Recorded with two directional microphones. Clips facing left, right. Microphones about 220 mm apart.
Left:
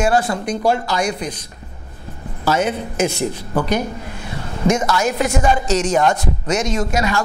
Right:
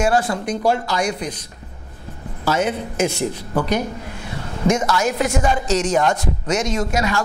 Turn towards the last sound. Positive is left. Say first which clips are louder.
# left 1 dB
turn(degrees=15)  # may be behind; listen again after turning